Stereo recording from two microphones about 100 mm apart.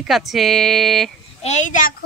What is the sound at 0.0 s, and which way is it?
Speech, centre (ahead or behind).